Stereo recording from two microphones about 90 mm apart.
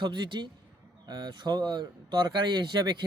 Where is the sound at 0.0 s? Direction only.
60° right (ahead or behind).